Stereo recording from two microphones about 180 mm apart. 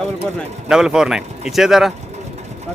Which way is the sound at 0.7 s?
5° right (ahead or behind).